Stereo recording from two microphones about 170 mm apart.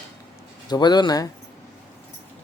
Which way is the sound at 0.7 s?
25° left (ahead or behind).